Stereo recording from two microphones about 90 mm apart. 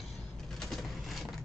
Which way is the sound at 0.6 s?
Centre (ahead or behind).